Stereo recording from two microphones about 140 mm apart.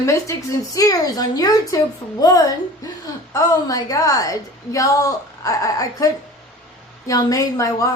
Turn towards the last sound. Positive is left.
turn(degrees=25)  # may be behind; listen again after turning